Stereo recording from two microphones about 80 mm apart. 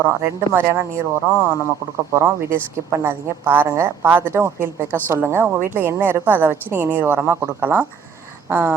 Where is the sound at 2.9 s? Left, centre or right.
Right.